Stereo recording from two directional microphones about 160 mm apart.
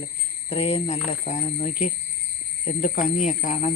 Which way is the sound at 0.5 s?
40° left (ahead or behind).